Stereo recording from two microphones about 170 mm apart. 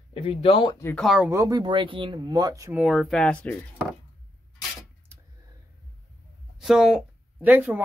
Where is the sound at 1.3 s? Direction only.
20° right (ahead or behind).